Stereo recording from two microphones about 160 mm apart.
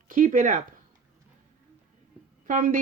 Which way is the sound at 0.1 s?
55° right (ahead or behind).